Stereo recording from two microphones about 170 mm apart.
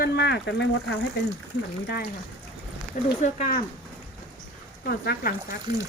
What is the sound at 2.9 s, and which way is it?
Speech, 60° left (ahead or behind).